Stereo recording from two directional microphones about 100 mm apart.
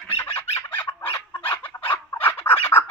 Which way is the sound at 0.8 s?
60° left (ahead or behind).